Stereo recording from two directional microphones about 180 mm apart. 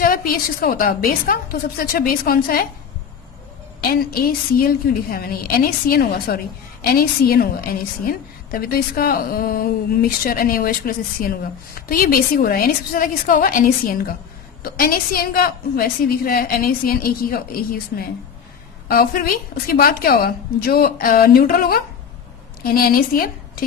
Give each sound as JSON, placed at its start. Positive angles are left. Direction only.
{"t": 0.0, "sound": "a woman's voice", "side_deg": 55}
{"t": 3.8, "sound": "a woman's voice", "side_deg": 55}